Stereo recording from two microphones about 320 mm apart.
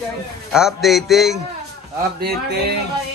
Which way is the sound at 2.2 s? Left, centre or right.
Right.